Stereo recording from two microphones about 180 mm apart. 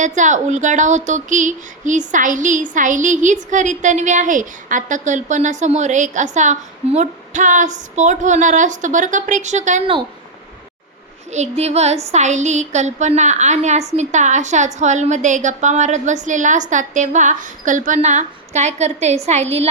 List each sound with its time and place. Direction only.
0.0 s speech: 45° right (ahead or behind)
11.3 s a woman's voice: 40° right (ahead or behind)